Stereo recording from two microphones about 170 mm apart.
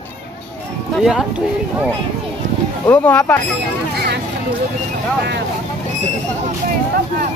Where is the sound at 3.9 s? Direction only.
70° right (ahead or behind).